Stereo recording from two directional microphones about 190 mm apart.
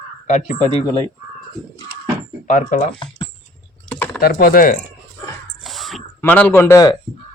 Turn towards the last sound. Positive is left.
turn(degrees=15)  # may be behind; listen again after turning